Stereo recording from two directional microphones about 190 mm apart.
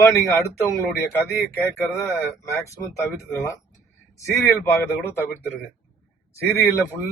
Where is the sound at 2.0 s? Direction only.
15° left (ahead or behind).